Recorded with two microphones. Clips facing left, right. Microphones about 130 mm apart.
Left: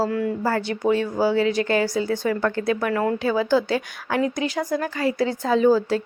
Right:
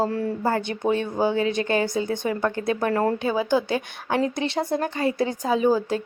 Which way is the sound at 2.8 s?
35° right (ahead or behind).